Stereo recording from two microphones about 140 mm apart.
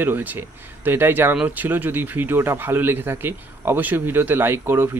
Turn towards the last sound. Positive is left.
turn(degrees=-15)  # may be behind; listen again after turning